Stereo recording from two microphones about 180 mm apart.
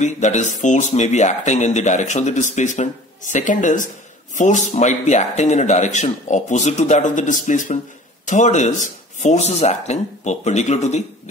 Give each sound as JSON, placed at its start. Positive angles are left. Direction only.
{"t": 0.0, "sound": "speech", "side_deg": 40}